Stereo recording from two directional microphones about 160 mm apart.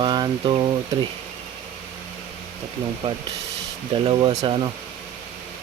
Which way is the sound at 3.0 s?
35° right (ahead or behind).